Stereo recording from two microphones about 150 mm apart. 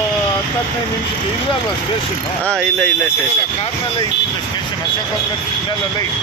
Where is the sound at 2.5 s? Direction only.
5° left (ahead or behind).